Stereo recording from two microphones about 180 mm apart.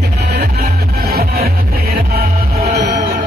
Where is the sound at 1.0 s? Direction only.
60° right (ahead or behind).